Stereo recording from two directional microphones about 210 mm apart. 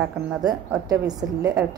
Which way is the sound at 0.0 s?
15° right (ahead or behind).